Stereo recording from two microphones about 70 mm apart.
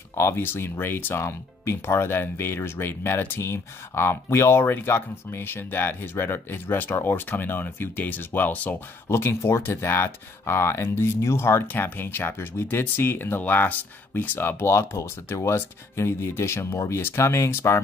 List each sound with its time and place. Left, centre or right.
0.1 s speech: left
9.1 s speech: left